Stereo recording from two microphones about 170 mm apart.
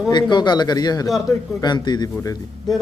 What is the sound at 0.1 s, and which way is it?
Speech, 25° left (ahead or behind).